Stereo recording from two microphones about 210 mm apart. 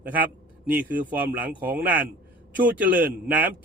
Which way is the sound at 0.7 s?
10° right (ahead or behind).